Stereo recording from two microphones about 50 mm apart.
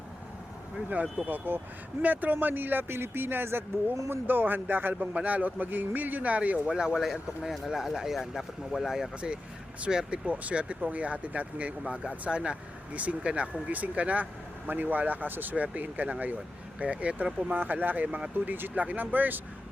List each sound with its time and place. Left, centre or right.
1.3 s speech: right
5.1 s speech: right
6.7 s speech: centre
10.2 s speech: right
14.7 s speech: right
17.5 s speech: right